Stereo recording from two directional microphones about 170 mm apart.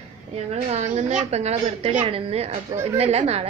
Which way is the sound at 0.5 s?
45° right (ahead or behind).